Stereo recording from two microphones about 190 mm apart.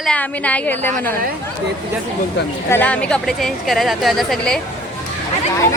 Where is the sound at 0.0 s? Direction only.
5° left (ahead or behind).